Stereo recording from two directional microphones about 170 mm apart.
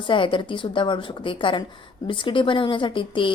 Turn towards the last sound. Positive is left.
turn(degrees=30)  # may be behind; listen again after turning